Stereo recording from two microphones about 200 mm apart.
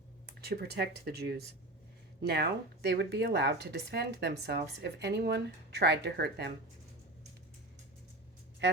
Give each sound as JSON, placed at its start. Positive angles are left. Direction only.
{"t": 0.3, "sound": "speech", "side_deg": -55}
{"t": 8.6, "sound": "speech", "side_deg": -65}